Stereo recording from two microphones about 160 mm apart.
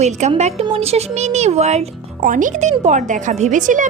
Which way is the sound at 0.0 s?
45° right (ahead or behind).